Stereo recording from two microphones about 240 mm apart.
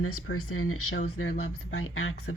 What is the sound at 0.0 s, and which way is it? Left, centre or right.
Speech, left.